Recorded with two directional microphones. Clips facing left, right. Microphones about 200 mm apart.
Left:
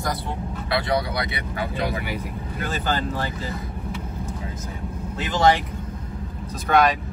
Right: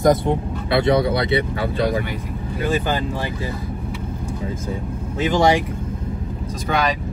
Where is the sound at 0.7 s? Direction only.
25° right (ahead or behind).